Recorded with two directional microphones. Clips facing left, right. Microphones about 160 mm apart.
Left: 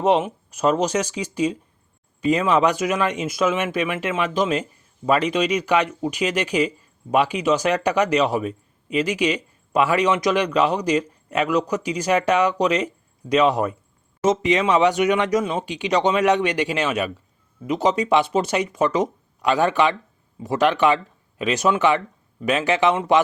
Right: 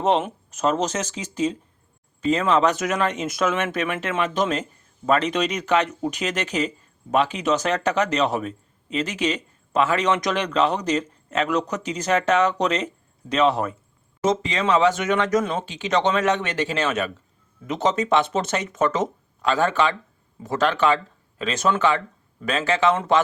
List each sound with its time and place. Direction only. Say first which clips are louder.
0.0 s a man's voice: left 2 dB; 10° left (ahead or behind)